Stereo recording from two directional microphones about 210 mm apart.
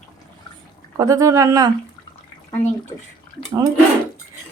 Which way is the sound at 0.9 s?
15° right (ahead or behind).